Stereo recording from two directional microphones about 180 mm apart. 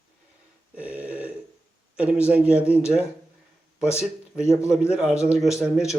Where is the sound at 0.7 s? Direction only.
10° right (ahead or behind).